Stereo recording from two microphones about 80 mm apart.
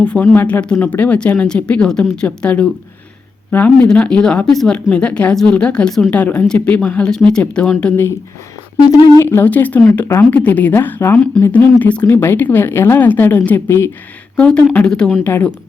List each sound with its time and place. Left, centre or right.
0.0 s a woman's voice: centre
6.1 s speech: centre
9.2 s a woman's voice: left
12.1 s a woman's voice: left
13.7 s speech: left
14.3 s speech: centre
15.2 s a woman's voice: left